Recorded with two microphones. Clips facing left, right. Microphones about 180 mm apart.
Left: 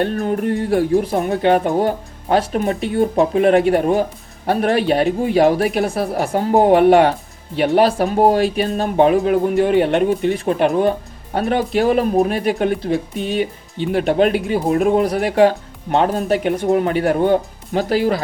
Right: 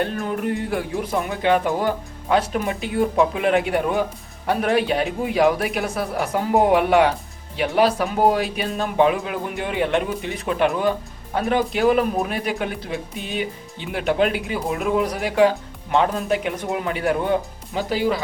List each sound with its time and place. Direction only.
0.1 s speech: 45° left (ahead or behind)